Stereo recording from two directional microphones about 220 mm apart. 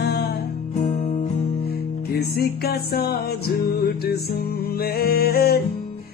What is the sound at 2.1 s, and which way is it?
Music, 45° left (ahead or behind).